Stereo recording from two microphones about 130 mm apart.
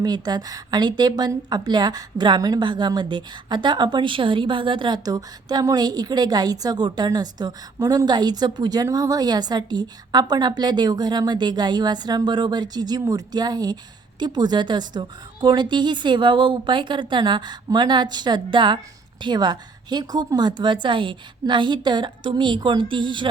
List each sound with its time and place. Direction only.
0.0 s a woman's voice: 30° right (ahead or behind)